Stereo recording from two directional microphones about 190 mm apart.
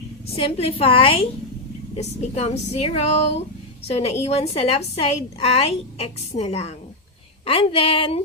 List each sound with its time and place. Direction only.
0.3 s a woman's voice: 30° left (ahead or behind)